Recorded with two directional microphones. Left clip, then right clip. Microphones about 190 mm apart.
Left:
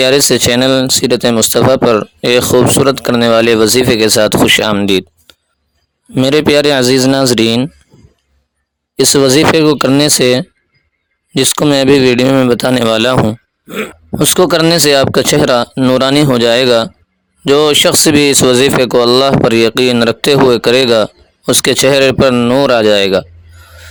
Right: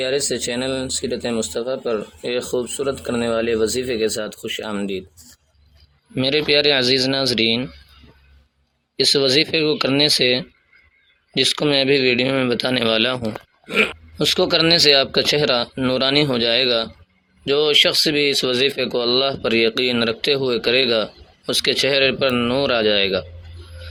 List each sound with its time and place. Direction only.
0.0 s speech: 45° left (ahead or behind)
6.1 s speech: 50° left (ahead or behind)
9.0 s speech: 55° left (ahead or behind)